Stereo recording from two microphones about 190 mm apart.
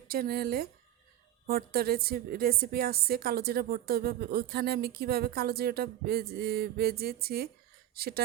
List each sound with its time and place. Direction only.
0.1 s a woman's voice: 55° right (ahead or behind)